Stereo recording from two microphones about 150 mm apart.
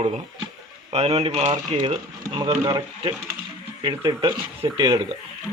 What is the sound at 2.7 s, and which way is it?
Speech, 30° right (ahead or behind).